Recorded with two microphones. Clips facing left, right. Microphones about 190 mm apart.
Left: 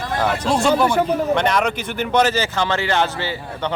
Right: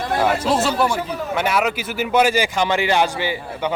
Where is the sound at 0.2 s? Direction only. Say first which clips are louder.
Even; 5° right (ahead or behind).